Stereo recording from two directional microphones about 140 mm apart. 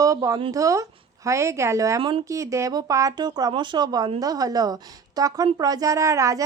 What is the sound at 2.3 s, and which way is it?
A woman's voice, 20° right (ahead or behind).